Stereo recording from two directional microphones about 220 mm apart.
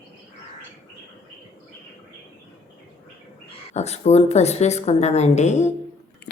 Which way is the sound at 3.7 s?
30° left (ahead or behind).